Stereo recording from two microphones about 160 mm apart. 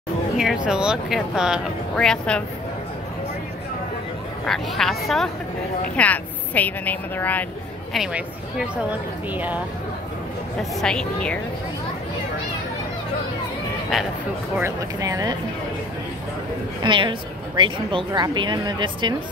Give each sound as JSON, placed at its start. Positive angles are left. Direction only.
{"t": 0.4, "sound": "speech", "side_deg": -5}
{"t": 4.5, "sound": "a woman's voice", "side_deg": 0}
{"t": 7.9, "sound": "speech", "side_deg": -5}
{"t": 10.6, "sound": "speech", "side_deg": 5}
{"t": 14.6, "sound": "a woman's voice", "side_deg": -20}
{"t": 16.8, "sound": "a woman's voice", "side_deg": -30}